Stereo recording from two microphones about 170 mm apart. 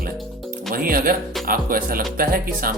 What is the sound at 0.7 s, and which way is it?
Speech, 60° right (ahead or behind).